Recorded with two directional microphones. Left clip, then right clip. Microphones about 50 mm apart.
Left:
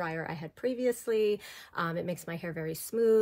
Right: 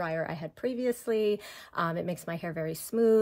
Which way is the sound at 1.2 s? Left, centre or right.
Right.